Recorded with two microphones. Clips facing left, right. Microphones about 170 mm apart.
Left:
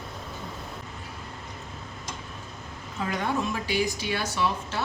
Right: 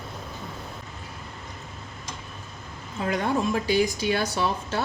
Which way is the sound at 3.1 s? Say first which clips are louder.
Right 4 dB; 40° right (ahead or behind).